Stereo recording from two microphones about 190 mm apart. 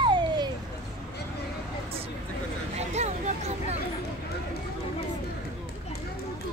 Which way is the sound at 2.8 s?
35° right (ahead or behind).